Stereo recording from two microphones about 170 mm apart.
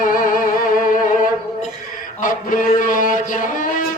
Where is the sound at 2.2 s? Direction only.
50° left (ahead or behind).